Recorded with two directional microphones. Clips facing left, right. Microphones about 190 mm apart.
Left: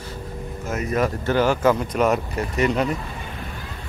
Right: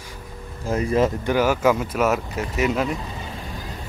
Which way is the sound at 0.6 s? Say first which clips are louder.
Right 3 dB; 30° right (ahead or behind).